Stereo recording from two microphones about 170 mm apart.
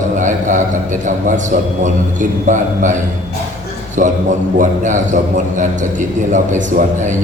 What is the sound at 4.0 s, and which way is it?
A man's voice, 50° right (ahead or behind).